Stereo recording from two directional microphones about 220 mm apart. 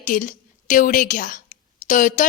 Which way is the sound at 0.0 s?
35° left (ahead or behind).